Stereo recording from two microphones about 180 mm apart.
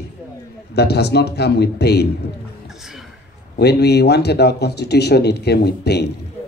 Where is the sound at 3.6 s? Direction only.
65° left (ahead or behind).